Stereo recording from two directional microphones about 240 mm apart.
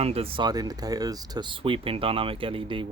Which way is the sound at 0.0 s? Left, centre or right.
Right.